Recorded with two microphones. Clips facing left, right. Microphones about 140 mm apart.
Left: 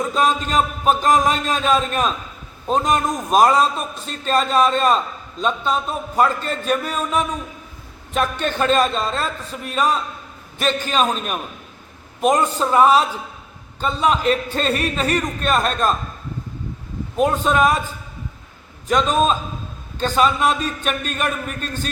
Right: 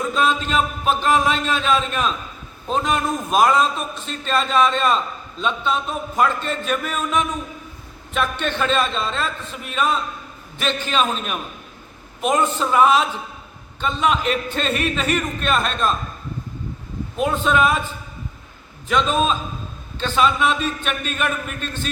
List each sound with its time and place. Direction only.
0.2 s a man's voice: 40° left (ahead or behind)
17.2 s a man's voice: 40° left (ahead or behind)
18.9 s a man's voice: 40° left (ahead or behind)